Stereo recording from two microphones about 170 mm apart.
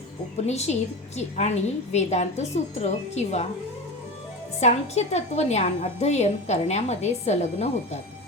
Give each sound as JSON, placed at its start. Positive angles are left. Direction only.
{"t": 0.4, "sound": "a woman's voice", "side_deg": 40}
{"t": 4.6, "sound": "a woman's voice", "side_deg": 40}